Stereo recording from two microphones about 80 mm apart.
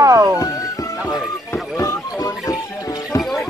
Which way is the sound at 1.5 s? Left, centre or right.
Left.